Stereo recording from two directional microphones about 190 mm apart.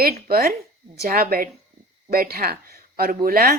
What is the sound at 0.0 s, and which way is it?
A woman's voice, 50° right (ahead or behind).